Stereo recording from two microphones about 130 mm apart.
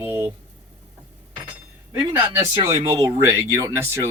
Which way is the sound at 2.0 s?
15° right (ahead or behind).